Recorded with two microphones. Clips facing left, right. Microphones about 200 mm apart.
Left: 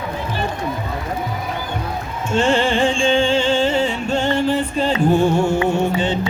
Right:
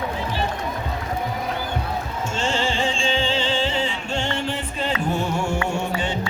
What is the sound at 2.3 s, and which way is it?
Music, 55° left (ahead or behind).